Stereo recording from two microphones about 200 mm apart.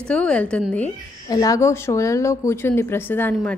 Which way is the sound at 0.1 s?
5° left (ahead or behind).